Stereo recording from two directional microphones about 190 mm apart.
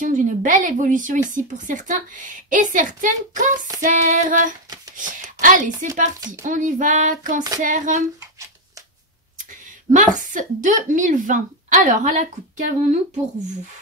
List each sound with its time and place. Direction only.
0.0 s a woman's voice: 40° right (ahead or behind)
9.5 s a woman's voice: 45° right (ahead or behind)